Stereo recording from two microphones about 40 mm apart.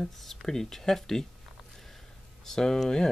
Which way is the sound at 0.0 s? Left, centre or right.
Centre.